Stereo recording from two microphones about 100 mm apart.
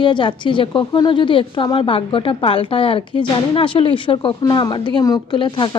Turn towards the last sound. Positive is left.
turn(degrees=55)  # may be behind; listen again after turning